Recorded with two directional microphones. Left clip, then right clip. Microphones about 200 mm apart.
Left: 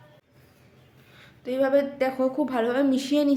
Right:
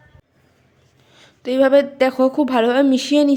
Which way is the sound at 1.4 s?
45° right (ahead or behind).